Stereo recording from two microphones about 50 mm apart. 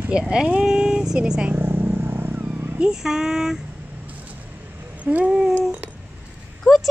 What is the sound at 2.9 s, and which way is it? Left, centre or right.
Speech, centre.